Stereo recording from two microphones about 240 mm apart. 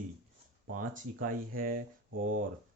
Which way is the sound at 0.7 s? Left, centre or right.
Right.